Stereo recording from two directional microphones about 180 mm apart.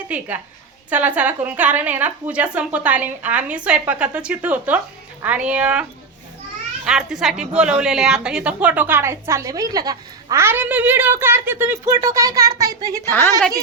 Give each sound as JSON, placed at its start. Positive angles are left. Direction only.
{"t": 0.1, "sound": "a woman's voice", "side_deg": -5}
{"t": 6.8, "sound": "a woman's voice", "side_deg": -5}